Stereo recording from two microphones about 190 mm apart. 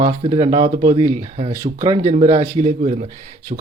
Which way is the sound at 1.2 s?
35° right (ahead or behind).